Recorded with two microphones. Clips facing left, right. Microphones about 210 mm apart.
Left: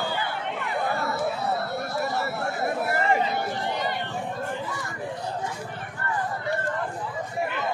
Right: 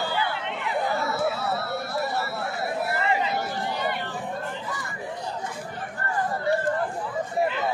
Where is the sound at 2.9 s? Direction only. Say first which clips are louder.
Left 3 dB; 45° left (ahead or behind).